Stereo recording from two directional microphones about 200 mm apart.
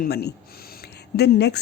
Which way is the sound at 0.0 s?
55° left (ahead or behind).